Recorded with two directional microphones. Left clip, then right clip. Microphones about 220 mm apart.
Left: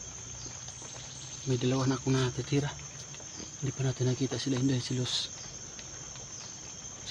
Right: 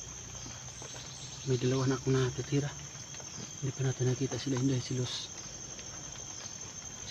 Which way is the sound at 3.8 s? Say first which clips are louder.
Left 1 dB; 55° left (ahead or behind).